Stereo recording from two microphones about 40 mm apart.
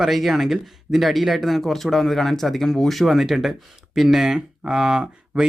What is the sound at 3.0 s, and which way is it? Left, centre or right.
Speech, centre.